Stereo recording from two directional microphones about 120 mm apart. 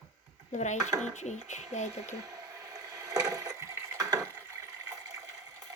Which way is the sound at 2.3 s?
25° right (ahead or behind).